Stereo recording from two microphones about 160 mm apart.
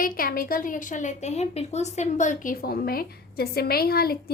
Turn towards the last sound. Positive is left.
turn(degrees=75)  # may be behind; listen again after turning